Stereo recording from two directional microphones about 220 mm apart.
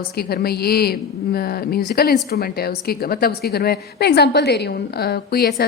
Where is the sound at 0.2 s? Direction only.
45° left (ahead or behind).